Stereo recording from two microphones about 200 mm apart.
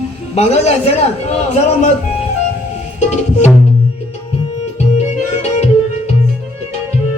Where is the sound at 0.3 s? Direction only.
35° left (ahead or behind).